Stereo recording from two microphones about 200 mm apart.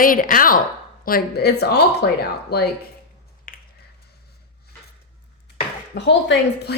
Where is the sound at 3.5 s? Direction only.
45° left (ahead or behind).